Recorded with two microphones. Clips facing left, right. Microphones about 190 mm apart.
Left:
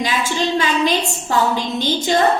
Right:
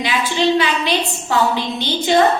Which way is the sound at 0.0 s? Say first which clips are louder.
Right 2 dB; 45° left (ahead or behind).